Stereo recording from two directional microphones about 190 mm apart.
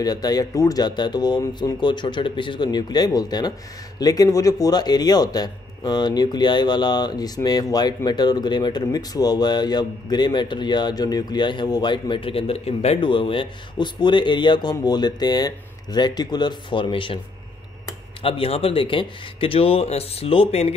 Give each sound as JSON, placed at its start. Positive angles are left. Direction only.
{"t": 0.0, "sound": "a man's voice", "side_deg": 20}
{"t": 18.2, "sound": "a man's voice", "side_deg": 30}